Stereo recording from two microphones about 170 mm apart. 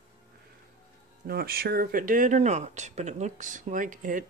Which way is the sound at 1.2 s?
65° right (ahead or behind).